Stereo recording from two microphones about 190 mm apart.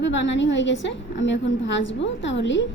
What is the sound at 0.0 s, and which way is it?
A woman's voice, 70° left (ahead or behind).